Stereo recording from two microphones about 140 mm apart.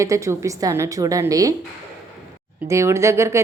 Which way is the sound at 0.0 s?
20° right (ahead or behind).